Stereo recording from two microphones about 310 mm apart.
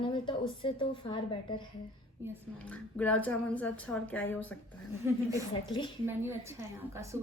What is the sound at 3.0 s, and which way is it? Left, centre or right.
Speech, centre.